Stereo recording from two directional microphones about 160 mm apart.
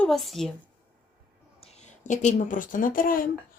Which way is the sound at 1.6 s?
45° left (ahead or behind).